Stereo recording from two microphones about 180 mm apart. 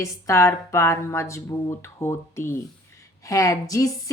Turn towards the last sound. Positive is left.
turn(degrees=20)  # may be behind; listen again after turning